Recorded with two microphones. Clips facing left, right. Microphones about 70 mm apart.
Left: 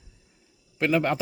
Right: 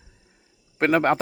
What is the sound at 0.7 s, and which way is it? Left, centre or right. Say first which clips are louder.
Speech: right 4 dB; right.